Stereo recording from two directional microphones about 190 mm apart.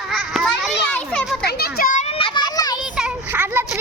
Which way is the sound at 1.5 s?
55° left (ahead or behind).